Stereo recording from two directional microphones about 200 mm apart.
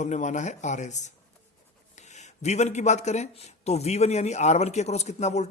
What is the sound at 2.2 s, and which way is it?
A man's voice, 35° left (ahead or behind).